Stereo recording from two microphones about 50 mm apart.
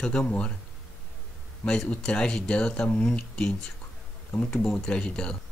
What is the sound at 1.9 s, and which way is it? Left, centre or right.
Speech, centre.